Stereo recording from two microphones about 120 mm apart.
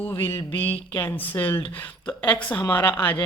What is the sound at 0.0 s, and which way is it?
Speech, 20° left (ahead or behind).